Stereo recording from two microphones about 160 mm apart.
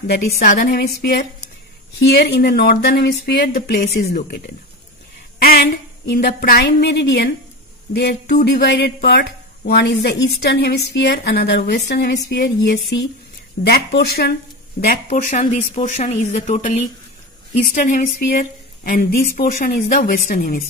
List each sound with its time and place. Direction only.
0.0 s a woman's voice: 80° left
2.0 s speech: 90° left
5.4 s a woman's voice: 80° left
15.0 s a woman's voice: 50° left (ahead or behind)